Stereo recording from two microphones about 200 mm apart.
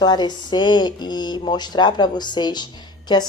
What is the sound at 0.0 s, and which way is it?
Speech, 20° left (ahead or behind).